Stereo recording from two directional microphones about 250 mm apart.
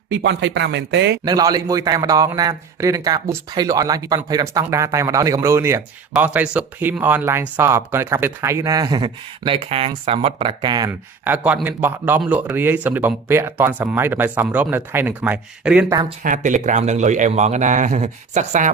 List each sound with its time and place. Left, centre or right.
0.1 s speech: right
1.2 s a man's voice: centre
16.0 s speech: right